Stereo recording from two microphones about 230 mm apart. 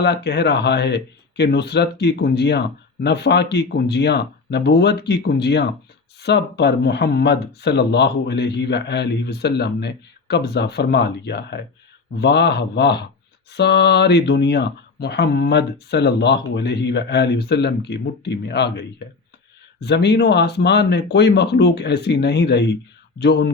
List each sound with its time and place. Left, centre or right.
0.0 s speech: left